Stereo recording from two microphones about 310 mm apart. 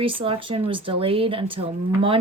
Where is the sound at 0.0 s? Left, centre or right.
Centre.